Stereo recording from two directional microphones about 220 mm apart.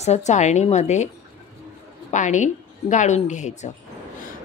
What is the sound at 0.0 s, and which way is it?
Speech, 30° left (ahead or behind).